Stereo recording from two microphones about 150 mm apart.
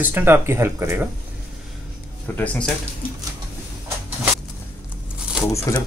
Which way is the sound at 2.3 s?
10° left (ahead or behind).